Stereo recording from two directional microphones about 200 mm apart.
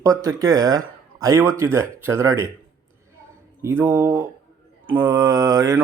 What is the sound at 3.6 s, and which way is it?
A man's voice, 10° right (ahead or behind).